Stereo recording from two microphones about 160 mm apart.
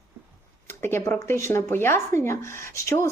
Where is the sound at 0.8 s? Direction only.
15° left (ahead or behind).